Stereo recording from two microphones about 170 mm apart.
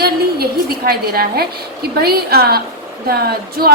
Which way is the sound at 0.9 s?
65° right (ahead or behind).